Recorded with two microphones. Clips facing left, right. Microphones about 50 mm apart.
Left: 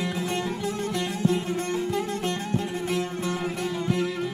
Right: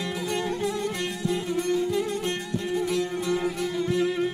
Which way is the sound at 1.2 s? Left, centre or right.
Left.